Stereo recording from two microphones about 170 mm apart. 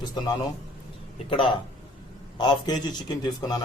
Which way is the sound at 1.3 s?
30° left (ahead or behind).